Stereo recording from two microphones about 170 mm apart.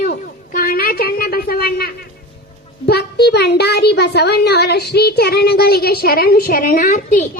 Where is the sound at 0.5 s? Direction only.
60° left (ahead or behind).